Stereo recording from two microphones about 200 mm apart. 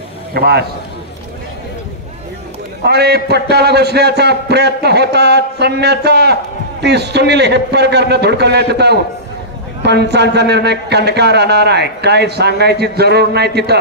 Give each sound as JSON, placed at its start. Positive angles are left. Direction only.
{"t": 0.3, "sound": "a man's voice", "side_deg": -50}
{"t": 2.8, "sound": "a man's voice", "side_deg": -55}